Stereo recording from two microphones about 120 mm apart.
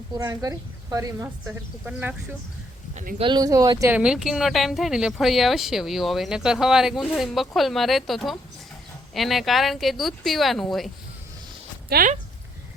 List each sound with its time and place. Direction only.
0.2 s a woman's voice: 30° right (ahead or behind); by 2.1 s 15° right (ahead or behind)
3.2 s speech: 40° right (ahead or behind)
3.8 s speech: 10° right (ahead or behind)